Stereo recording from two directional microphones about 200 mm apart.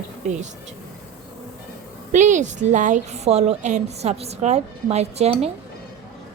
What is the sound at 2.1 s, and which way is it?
A woman's voice, 40° right (ahead or behind).